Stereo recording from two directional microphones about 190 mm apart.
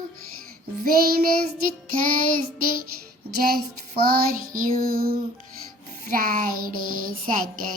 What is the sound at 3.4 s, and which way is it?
Child singing, 50° right (ahead or behind).